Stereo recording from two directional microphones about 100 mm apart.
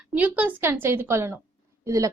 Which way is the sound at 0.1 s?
15° right (ahead or behind).